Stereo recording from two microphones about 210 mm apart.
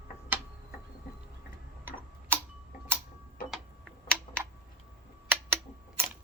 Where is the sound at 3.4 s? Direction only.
45° left (ahead or behind).